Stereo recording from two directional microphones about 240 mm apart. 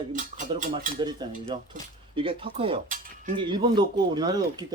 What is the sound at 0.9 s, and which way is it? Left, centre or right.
Speech, centre.